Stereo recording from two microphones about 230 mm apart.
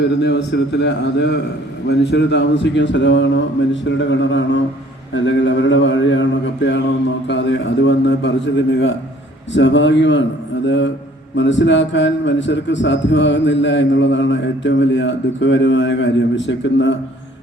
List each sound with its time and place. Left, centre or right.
0.0 s a man's voice: left